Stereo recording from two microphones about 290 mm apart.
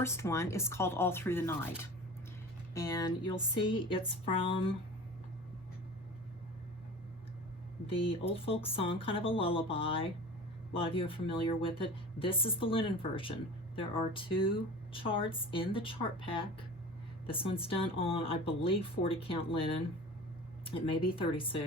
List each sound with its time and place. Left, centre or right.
0.0 s speech: centre
7.9 s speech: centre